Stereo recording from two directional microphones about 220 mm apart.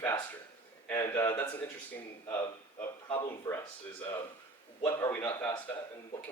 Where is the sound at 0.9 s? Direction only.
10° left (ahead or behind).